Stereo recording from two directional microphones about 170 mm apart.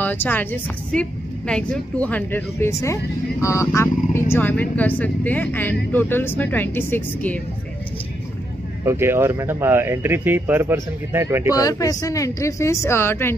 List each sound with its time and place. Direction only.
0.0 s speech: 10° left (ahead or behind)
8.8 s speech: 15° right (ahead or behind)
11.5 s speech: 20° left (ahead or behind)